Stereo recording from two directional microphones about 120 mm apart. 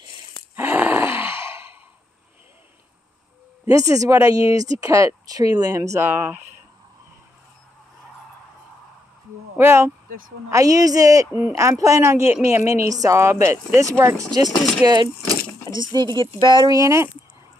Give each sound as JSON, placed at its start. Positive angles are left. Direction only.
{"t": 0.6, "sound": "sigh", "side_deg": -15}
{"t": 3.6, "sound": "speech", "side_deg": -30}
{"t": 6.0, "sound": "speech", "side_deg": -15}
{"t": 9.6, "sound": "speech", "side_deg": -20}
{"t": 14.5, "sound": "speech", "side_deg": 0}
{"t": 15.7, "sound": "speech", "side_deg": -35}